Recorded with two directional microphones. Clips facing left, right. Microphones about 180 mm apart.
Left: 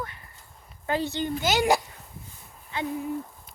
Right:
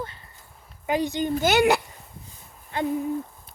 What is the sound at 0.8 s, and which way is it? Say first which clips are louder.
Speech: right 3 dB; 15° right (ahead or behind).